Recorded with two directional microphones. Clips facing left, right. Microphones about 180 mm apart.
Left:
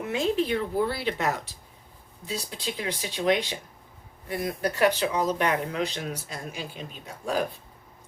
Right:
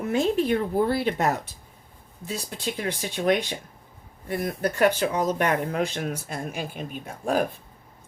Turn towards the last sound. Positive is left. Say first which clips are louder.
# right 4 dB
turn(degrees=-50)  # may be behind; listen again after turning